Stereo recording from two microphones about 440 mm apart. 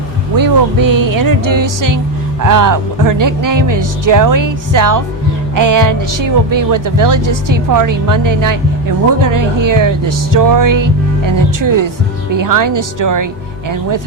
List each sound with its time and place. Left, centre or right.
0.3 s speech: right